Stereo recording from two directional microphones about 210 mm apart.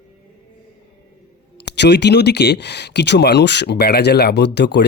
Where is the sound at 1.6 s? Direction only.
55° left (ahead or behind).